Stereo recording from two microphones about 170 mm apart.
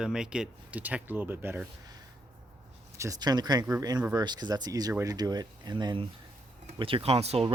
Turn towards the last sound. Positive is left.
turn(degrees=-35)  # may be behind; listen again after turning